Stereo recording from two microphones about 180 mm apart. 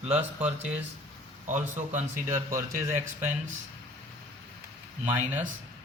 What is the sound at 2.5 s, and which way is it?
Speech, 15° right (ahead or behind).